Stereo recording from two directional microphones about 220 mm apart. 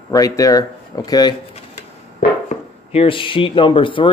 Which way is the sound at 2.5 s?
30° left (ahead or behind).